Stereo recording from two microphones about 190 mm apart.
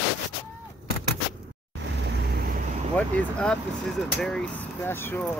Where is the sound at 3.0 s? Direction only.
5° left (ahead or behind).